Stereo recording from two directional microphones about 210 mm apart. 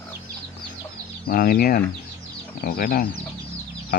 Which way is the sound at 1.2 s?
45° left (ahead or behind).